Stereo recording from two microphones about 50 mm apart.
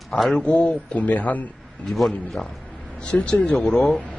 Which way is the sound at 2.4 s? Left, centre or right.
Left.